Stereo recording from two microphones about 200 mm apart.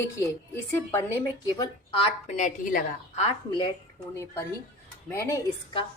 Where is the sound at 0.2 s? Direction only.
10° left (ahead or behind).